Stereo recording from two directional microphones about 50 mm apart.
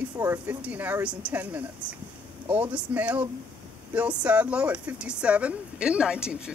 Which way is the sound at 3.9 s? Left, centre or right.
Right.